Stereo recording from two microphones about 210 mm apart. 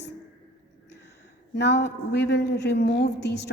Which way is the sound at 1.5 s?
55° left (ahead or behind).